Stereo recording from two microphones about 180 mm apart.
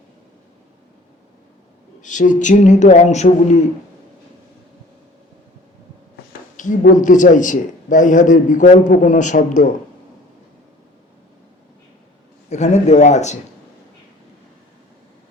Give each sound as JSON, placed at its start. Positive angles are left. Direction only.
{"t": 2.0, "sound": "speech", "side_deg": 45}
{"t": 6.6, "sound": "a sound", "side_deg": 45}
{"t": 6.9, "sound": "a man's voice", "side_deg": 45}
{"t": 12.5, "sound": "speech", "side_deg": 40}